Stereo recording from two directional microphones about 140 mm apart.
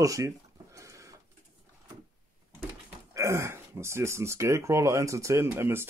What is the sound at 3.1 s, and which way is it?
Speech, 20° right (ahead or behind).